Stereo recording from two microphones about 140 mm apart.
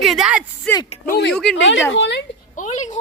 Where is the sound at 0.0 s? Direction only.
Centre (ahead or behind).